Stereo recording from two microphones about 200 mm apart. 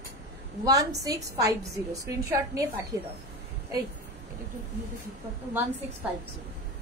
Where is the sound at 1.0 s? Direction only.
15° right (ahead or behind).